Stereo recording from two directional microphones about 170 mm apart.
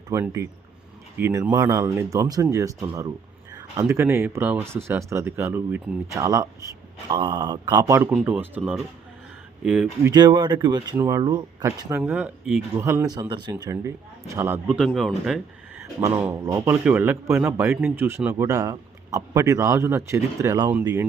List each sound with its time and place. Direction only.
0.1 s speech: 15° right (ahead or behind)
10.1 s speech: 25° right (ahead or behind)
11.9 s speech: 10° right (ahead or behind)
14.8 s speech: centre (ahead or behind)
15.8 s speech: 15° right (ahead or behind)